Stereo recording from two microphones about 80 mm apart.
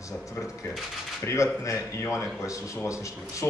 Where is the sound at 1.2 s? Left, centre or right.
Left.